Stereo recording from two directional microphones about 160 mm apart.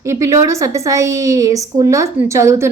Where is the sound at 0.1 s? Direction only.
20° right (ahead or behind).